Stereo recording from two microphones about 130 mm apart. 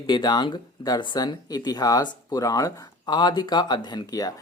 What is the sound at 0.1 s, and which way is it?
Speech, 35° left (ahead or behind).